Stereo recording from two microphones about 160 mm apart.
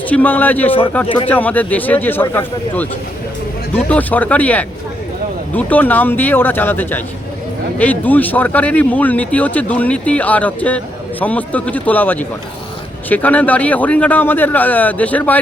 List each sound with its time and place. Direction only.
0.1 s speech: 10° left (ahead or behind)
1.0 s speech: 35° left (ahead or behind)
1.3 s speech: 10° left (ahead or behind)